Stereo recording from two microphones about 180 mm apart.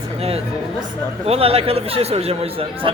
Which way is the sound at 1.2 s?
35° right (ahead or behind).